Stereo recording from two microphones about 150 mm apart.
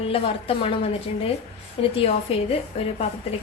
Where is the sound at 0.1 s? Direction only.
40° left (ahead or behind).